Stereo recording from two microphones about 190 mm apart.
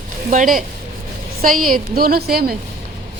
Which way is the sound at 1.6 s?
50° right (ahead or behind).